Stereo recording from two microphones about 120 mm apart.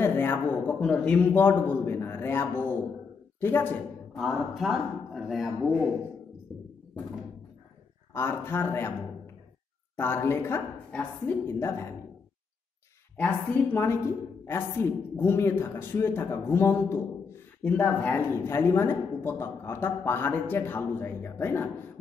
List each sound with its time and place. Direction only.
0.0 s a man's voice: 15° left (ahead or behind)
4.1 s speech: centre (ahead or behind)
8.1 s a woman's voice: 20° left (ahead or behind)
13.2 s a woman's voice: 15° left (ahead or behind)